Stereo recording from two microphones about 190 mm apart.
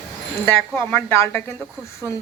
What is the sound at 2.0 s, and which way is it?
Speech, 15° right (ahead or behind).